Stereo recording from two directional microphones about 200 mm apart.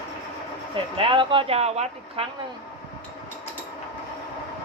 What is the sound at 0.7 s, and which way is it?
Speech, 25° right (ahead or behind).